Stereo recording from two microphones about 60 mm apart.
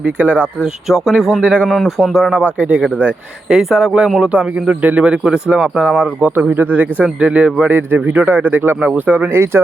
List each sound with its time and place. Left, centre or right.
0.0 s speech: right
0.9 s speech: centre
1.4 s speech: centre
2.0 s speech: centre
2.6 s speech: right
3.5 s speech: centre
5.7 s speech: centre
6.0 s speech: right
7.7 s speech: right
9.3 s speech: right